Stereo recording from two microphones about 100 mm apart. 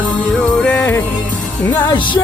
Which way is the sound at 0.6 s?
15° left (ahead or behind).